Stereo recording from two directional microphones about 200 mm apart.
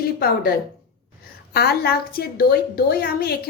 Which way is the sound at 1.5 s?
50° left (ahead or behind).